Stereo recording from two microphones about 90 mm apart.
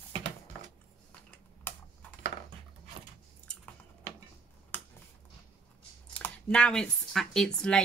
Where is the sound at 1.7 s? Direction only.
25° left (ahead or behind).